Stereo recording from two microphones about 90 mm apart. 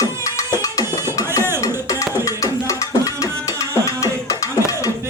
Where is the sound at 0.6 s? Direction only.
40° left (ahead or behind).